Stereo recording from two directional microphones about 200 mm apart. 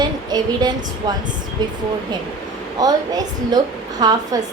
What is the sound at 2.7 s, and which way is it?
A woman's voice, 20° right (ahead or behind).